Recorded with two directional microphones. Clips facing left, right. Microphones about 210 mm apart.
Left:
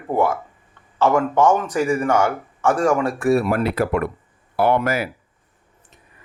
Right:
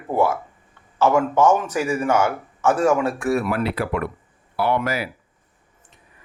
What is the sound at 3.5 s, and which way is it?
Speech, 45° left (ahead or behind).